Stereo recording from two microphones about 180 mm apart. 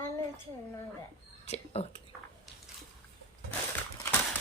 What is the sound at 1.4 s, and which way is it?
Speech, 35° left (ahead or behind).